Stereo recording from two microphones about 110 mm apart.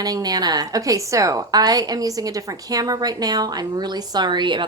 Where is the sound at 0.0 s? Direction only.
35° right (ahead or behind).